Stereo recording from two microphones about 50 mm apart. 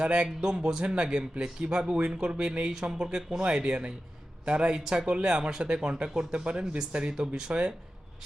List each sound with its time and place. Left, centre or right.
0.0 s speech: centre